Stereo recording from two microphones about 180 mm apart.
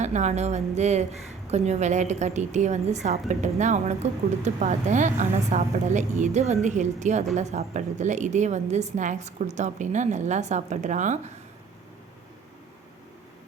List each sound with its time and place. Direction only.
0.0 s a woman's voice: 40° right (ahead or behind)